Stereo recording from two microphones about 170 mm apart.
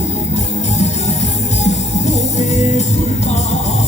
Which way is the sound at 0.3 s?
40° left (ahead or behind).